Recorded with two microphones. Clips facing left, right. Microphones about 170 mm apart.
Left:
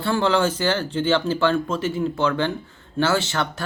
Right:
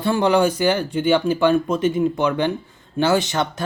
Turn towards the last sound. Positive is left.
turn(degrees=-20)  # may be behind; listen again after turning